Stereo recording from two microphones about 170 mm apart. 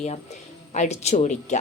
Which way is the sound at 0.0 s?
40° left (ahead or behind).